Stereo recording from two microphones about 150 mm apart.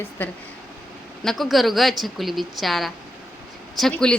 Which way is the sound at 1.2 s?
Centre (ahead or behind).